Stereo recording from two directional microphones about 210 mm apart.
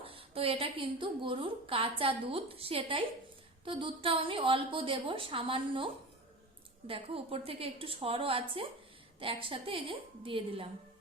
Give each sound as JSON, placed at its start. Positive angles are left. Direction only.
{"t": 0.0, "sound": "a woman's voice", "side_deg": -25}